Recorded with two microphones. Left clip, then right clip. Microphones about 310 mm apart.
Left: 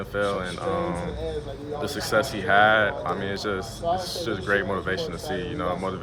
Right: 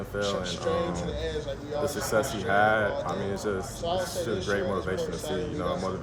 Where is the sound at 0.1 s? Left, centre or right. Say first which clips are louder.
Left 4 dB; centre.